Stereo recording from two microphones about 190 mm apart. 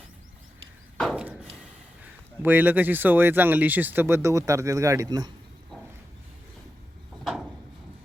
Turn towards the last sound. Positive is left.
turn(degrees=0)  # may be behind; listen again after turning